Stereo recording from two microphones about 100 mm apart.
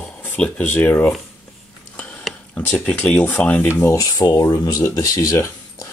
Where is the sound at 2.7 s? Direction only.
15° left (ahead or behind).